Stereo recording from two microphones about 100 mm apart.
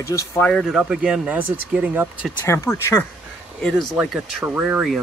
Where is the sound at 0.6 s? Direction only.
5° right (ahead or behind).